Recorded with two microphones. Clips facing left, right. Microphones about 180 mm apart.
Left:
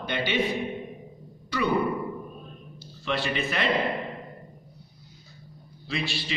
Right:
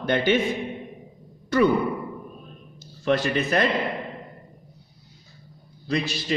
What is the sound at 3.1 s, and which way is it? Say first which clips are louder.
Speech: right 6 dB; 45° right (ahead or behind).